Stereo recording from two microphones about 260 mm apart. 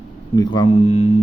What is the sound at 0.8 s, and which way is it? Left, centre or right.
Mantra, left.